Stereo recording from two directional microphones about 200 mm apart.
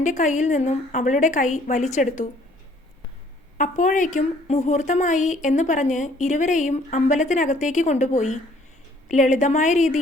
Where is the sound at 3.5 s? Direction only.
40° left (ahead or behind).